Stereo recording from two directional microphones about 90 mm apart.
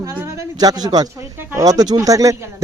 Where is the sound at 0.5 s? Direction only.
45° right (ahead or behind).